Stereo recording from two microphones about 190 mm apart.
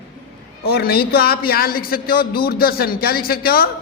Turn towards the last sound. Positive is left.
turn(degrees=55)  # may be behind; listen again after turning